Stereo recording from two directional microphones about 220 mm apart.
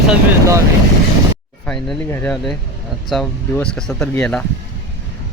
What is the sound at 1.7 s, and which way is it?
Speech, 5° left (ahead or behind).